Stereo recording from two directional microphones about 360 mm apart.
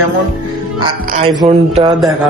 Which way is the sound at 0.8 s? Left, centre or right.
Centre.